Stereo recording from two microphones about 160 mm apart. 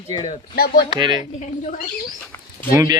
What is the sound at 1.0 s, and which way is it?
Speech, 30° right (ahead or behind).